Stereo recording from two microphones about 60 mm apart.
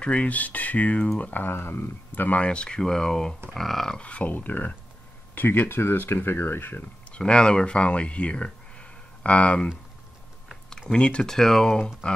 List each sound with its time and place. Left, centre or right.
0.0 s speech: centre
4.0 s speech: left
7.1 s speech: centre
10.9 s speech: centre
11.3 s speech: centre